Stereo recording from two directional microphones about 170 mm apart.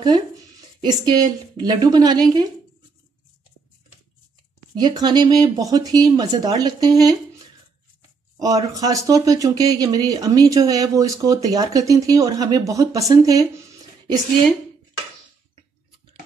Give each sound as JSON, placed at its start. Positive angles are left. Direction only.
{"t": 0.7, "sound": "speech", "side_deg": -25}
{"t": 4.7, "sound": "speech", "side_deg": -25}
{"t": 8.4, "sound": "speech", "side_deg": -20}